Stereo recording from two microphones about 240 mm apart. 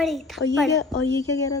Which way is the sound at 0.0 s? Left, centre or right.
Centre.